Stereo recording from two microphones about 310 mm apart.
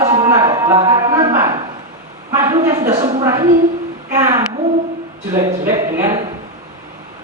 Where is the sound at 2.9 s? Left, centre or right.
Centre.